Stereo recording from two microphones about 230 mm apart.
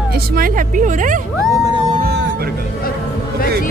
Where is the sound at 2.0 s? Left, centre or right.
Right.